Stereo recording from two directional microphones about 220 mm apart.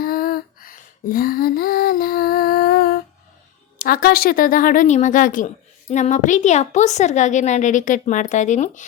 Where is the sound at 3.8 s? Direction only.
40° left (ahead or behind).